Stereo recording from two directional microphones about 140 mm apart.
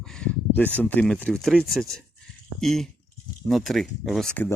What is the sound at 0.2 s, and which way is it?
Speech, 10° left (ahead or behind).